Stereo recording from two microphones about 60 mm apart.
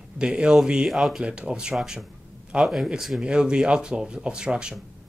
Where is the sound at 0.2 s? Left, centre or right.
Centre.